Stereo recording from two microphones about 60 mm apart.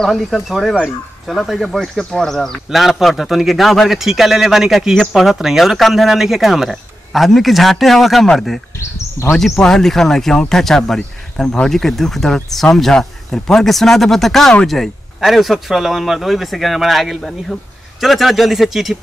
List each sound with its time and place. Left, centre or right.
0.0 s speech: centre
8.7 s speech: left
9.4 s speech: centre
11.7 s speech: centre